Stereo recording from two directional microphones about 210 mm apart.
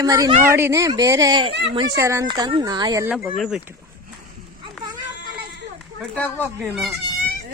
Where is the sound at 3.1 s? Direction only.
5° right (ahead or behind).